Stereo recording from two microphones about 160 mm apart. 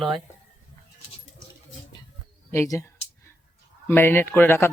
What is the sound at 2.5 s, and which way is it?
Speech, 20° left (ahead or behind).